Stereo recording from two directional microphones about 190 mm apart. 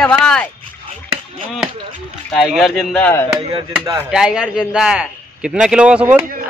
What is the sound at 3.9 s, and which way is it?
A man's voice, 5° right (ahead or behind).